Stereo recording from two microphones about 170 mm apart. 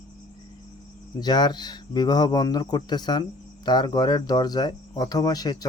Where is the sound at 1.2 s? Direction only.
25° left (ahead or behind).